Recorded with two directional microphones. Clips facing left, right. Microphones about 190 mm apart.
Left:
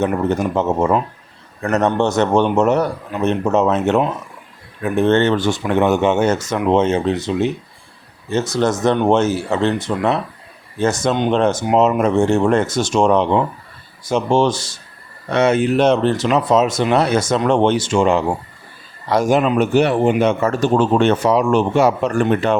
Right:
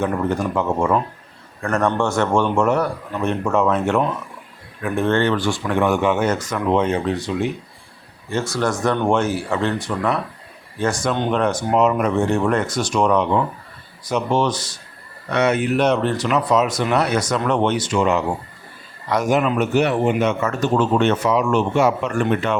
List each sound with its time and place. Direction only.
0.0 s a man's voice: 25° left (ahead or behind)